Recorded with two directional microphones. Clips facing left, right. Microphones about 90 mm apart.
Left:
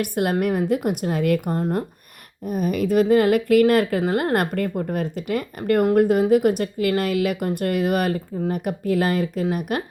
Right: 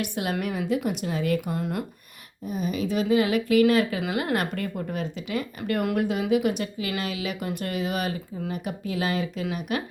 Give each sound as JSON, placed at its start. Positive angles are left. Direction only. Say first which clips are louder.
{"t": 0.0, "sound": "speech", "louder": "left 7 dB", "side_deg": 50}
{"t": 1.5, "sound": "speech", "louder": "left 6 dB", "side_deg": 40}
{"t": 2.5, "sound": "speech", "louder": "left 6 dB", "side_deg": 55}